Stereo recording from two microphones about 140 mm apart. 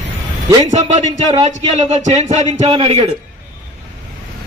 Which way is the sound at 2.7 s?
35° right (ahead or behind).